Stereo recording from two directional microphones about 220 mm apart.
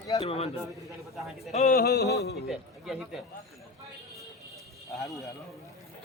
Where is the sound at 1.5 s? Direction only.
30° left (ahead or behind).